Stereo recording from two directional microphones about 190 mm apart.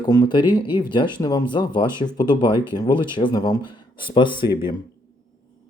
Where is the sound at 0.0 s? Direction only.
20° left (ahead or behind).